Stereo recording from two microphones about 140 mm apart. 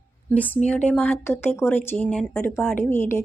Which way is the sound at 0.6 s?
10° left (ahead or behind).